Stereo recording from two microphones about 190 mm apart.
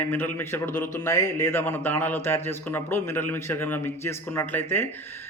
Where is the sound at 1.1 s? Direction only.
15° left (ahead or behind).